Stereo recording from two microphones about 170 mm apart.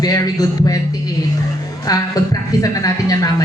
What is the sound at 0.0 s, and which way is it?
Speech, 20° left (ahead or behind).